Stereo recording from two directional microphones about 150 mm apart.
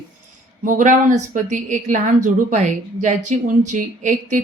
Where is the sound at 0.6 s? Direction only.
60° right (ahead or behind).